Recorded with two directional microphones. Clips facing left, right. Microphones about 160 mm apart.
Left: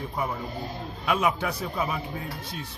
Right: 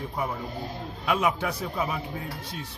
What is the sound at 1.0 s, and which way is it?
Speech, 20° right (ahead or behind).